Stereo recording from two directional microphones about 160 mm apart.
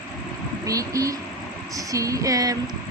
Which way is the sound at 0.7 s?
20° right (ahead or behind).